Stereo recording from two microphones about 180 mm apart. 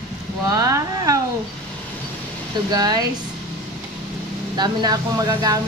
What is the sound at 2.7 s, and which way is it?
Speech, 20° right (ahead or behind).